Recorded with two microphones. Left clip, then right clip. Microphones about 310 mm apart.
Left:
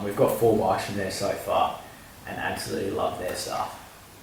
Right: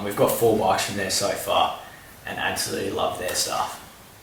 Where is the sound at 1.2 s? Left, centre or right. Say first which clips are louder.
Right 2 dB; centre.